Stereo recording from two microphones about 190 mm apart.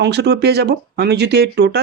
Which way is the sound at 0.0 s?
60° right (ahead or behind).